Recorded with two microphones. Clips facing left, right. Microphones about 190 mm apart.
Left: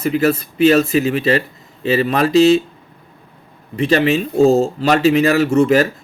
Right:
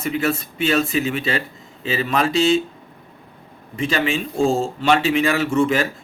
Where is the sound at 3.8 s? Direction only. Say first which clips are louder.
Left 7 dB; 40° left (ahead or behind).